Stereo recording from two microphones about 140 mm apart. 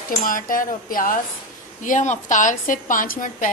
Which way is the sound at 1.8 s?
60° left (ahead or behind).